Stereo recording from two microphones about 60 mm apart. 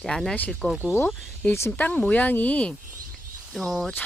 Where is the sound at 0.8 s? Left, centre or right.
Left.